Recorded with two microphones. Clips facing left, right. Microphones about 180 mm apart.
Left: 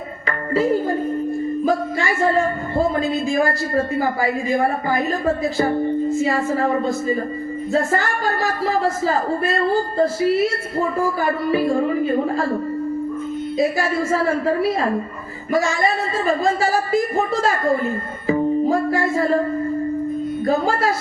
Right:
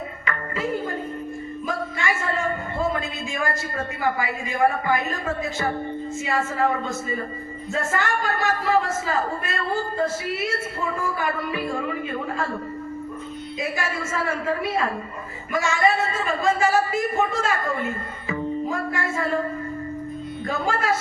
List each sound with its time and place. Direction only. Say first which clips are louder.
0.3 s a woman's voice: left 9 dB; 35° left (ahead or behind)
13.6 s a woman's voice: left 9 dB; 35° left (ahead or behind)
20.4 s a woman's voice: left 6 dB; 35° left (ahead or behind)